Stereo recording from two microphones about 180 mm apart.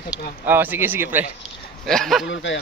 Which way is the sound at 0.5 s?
10° right (ahead or behind).